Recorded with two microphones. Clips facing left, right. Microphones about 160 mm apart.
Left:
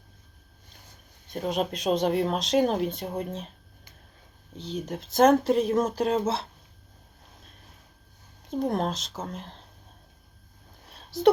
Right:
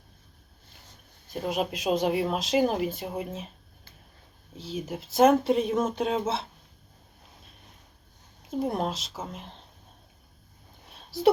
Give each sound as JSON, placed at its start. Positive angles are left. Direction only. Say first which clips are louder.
{"t": 1.3, "sound": "speech", "louder": "left 1 dB", "side_deg": -5}
{"t": 4.5, "sound": "speech", "louder": "left 1 dB", "side_deg": -5}
{"t": 8.4, "sound": "speech", "louder": "left 1 dB", "side_deg": -5}
{"t": 10.8, "sound": "a sound", "louder": "left 1 dB", "side_deg": 0}